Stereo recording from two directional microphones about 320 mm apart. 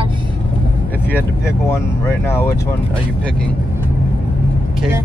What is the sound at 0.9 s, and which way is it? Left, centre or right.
Vehicle, centre.